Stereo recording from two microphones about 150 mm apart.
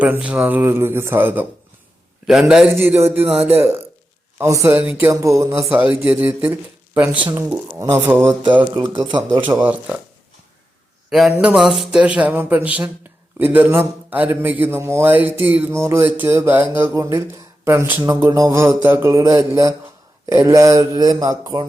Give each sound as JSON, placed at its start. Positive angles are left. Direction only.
{"t": 0.0, "sound": "a man's voice", "side_deg": -10}
{"t": 9.6, "sound": "a man's voice", "side_deg": -10}
{"t": 11.1, "sound": "a man's voice", "side_deg": -5}